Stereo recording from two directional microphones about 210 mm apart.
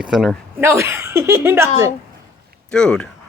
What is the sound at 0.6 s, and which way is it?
Speech, 10° right (ahead or behind).